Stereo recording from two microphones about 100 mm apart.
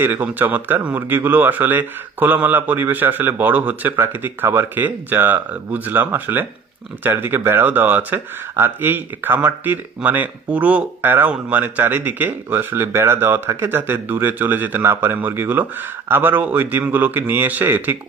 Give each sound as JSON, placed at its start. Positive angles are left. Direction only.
{"t": 0.0, "sound": "speech", "side_deg": -20}